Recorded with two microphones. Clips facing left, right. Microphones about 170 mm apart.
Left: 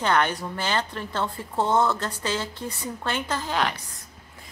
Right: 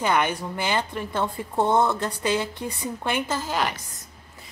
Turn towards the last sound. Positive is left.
turn(degrees=-5)  # may be behind; listen again after turning